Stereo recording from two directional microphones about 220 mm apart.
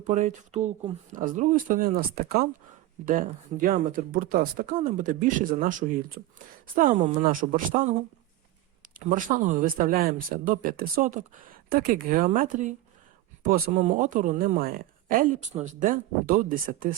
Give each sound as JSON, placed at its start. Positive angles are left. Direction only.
{"t": 0.1, "sound": "speech", "side_deg": -35}
{"t": 9.0, "sound": "speech", "side_deg": -35}